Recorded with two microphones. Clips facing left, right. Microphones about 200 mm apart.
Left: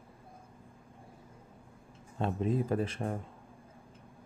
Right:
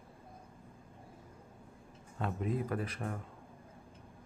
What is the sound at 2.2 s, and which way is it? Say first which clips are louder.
Speech: left 4 dB; 25° left (ahead or behind).